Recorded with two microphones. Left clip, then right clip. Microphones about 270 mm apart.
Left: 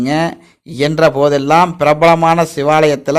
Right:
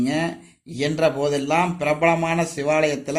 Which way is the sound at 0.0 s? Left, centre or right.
Left.